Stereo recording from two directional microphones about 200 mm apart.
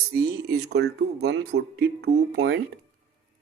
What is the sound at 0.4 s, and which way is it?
Speech, 55° right (ahead or behind).